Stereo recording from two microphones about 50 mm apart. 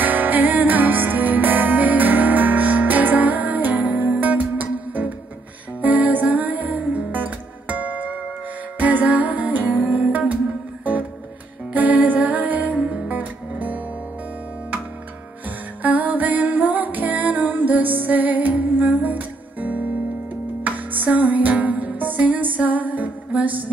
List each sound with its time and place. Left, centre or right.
0.0 s music: right
11.7 s music: right
15.8 s music: right